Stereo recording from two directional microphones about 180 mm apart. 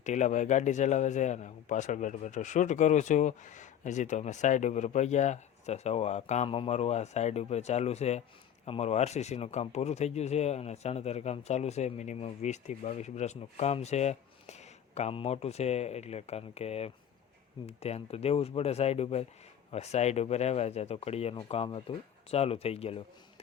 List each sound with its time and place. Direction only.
0.0 s speech: 40° left (ahead or behind)